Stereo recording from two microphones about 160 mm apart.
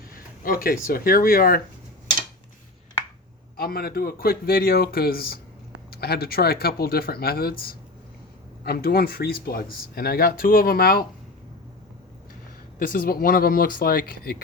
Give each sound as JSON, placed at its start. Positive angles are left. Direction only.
{"t": 0.1, "sound": "a sound", "side_deg": 65}
{"t": 0.9, "sound": "speech", "side_deg": 65}
{"t": 3.6, "sound": "speech", "side_deg": 70}
{"t": 8.6, "sound": "speech", "side_deg": 75}
{"t": 12.8, "sound": "speech", "side_deg": 60}